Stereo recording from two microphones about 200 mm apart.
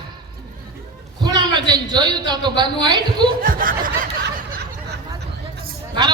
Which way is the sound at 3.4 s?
45° right (ahead or behind).